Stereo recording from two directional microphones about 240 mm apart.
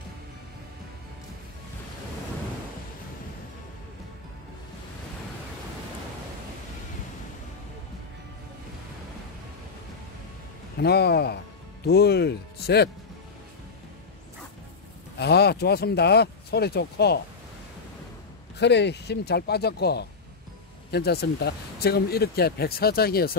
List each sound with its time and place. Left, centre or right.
10.8 s speech: left
15.1 s speech: left
18.6 s speech: left